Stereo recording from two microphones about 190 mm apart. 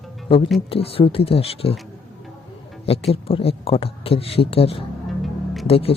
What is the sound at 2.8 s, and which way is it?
Speech, 30° left (ahead or behind).